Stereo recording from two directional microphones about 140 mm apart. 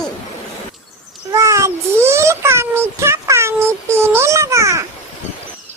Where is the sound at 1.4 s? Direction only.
20° right (ahead or behind).